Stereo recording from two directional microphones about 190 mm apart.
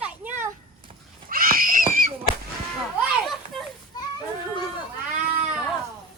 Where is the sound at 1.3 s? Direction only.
50° right (ahead or behind).